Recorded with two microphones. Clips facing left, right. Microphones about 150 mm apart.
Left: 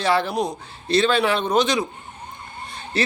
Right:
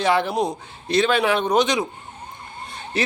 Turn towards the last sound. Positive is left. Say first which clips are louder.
# left 1 dB
turn(degrees=-15)  # may be behind; listen again after turning